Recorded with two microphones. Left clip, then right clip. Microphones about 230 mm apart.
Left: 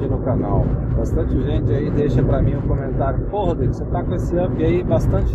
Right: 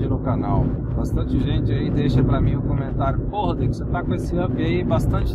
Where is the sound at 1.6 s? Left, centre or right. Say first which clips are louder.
Left 4 dB; right.